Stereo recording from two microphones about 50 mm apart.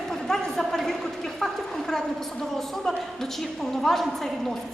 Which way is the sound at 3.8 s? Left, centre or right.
Centre.